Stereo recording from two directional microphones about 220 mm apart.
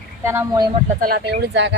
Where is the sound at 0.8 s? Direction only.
40° right (ahead or behind).